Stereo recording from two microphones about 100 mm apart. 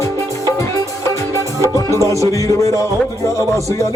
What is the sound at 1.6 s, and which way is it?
Music, 30° left (ahead or behind).